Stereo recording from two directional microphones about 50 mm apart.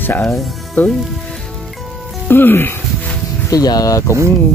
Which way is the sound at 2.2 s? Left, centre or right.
Left.